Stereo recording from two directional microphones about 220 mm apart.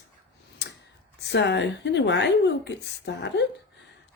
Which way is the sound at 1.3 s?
50° left (ahead or behind).